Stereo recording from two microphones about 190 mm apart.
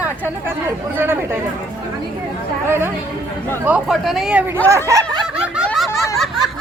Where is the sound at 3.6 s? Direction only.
5° right (ahead or behind).